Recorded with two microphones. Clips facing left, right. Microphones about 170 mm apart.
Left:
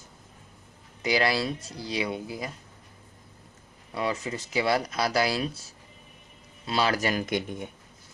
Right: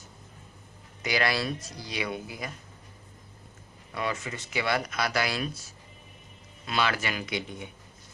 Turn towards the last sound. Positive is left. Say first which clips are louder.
# left 5 dB
turn(degrees=50)  # may be behind; listen again after turning